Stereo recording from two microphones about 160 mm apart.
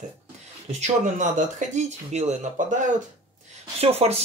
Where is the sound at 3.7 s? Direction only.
40° right (ahead or behind).